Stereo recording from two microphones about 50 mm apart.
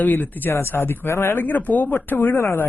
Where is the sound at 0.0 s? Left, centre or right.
Left.